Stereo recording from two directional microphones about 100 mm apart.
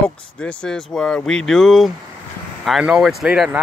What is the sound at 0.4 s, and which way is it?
Speech, 10° left (ahead or behind).